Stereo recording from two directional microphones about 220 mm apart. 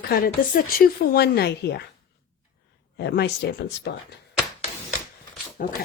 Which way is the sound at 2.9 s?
45° left (ahead or behind).